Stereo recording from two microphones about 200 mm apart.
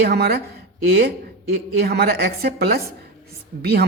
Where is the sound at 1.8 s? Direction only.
55° right (ahead or behind).